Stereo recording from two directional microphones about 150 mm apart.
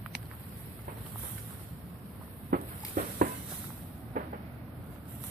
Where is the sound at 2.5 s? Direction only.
70° right (ahead or behind).